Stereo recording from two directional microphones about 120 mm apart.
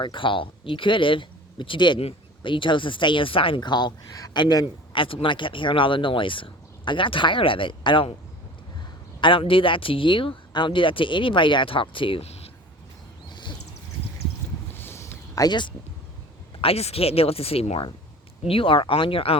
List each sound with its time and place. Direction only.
0.0 s speech: 40° left (ahead or behind)
4.9 s speech: 45° left (ahead or behind)
9.2 s speech: 45° left (ahead or behind)
13.3 s a sound: 40° left (ahead or behind)
14.8 s a sound: 20° left (ahead or behind); by 15.7 s 40° left (ahead or behind)
16.6 s speech: 55° left (ahead or behind)